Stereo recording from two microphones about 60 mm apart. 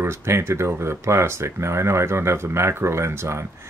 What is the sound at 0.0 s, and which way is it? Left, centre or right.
Speech, right.